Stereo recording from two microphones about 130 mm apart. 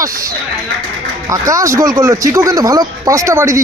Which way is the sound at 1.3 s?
25° right (ahead or behind).